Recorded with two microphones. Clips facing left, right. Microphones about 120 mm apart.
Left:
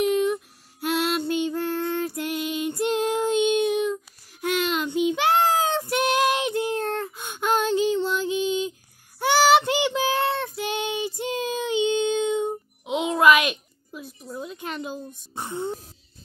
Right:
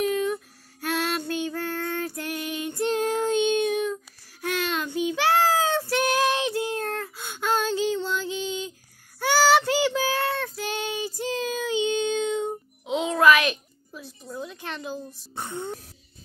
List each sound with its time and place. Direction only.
0.3 s female singing: 15° left (ahead or behind)
3.8 s child singing: 15° left (ahead or behind)
14.3 s a sound: 20° left (ahead or behind)
15.3 s throat clearing: 20° left (ahead or behind)